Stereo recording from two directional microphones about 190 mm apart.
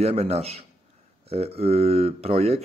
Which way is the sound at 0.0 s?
35° right (ahead or behind).